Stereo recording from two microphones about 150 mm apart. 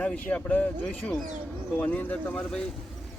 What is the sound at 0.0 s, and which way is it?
Speech, 5° left (ahead or behind).